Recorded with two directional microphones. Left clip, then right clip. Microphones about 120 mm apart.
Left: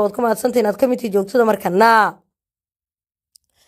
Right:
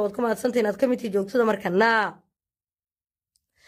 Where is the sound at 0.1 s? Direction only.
25° left (ahead or behind).